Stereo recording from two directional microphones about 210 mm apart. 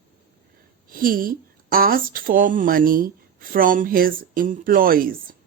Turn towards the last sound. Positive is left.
turn(degrees=-45)  # may be behind; listen again after turning